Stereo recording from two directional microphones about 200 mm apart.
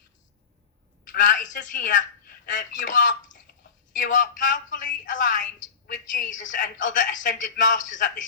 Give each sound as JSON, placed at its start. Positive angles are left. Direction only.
{"t": 1.1, "sound": "a woman's voice", "side_deg": 40}